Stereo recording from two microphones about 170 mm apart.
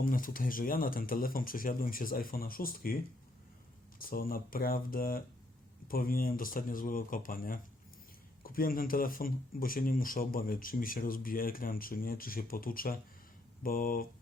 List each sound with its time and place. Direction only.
0.0 s speech: 55° left (ahead or behind)